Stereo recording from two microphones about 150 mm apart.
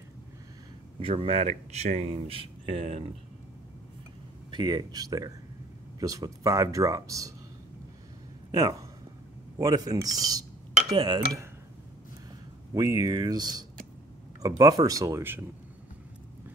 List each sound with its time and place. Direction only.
0.9 s speech: 40° right (ahead or behind)
4.5 s speech: 30° right (ahead or behind)
8.5 s speech: 25° right (ahead or behind)
12.7 s speech: 20° right (ahead or behind)